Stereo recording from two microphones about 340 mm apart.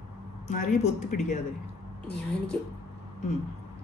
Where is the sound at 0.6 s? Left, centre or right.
Left.